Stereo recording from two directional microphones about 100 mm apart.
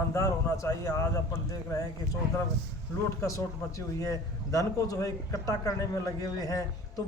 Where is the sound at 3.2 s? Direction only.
35° left (ahead or behind).